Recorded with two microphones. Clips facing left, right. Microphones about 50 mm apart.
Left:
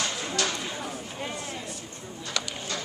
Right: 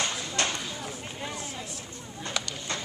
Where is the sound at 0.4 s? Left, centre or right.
Right.